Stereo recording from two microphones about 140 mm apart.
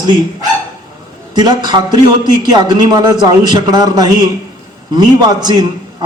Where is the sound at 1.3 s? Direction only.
30° right (ahead or behind).